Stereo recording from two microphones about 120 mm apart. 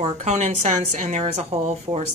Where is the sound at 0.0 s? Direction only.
70° right (ahead or behind).